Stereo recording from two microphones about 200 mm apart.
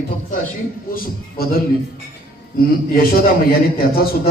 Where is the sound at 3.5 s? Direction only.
50° left (ahead or behind).